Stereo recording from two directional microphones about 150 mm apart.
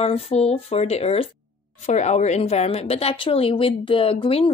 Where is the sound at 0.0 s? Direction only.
40° left (ahead or behind).